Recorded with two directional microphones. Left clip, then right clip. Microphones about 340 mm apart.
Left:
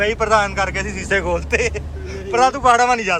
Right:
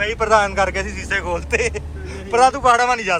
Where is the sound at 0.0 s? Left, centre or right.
Centre.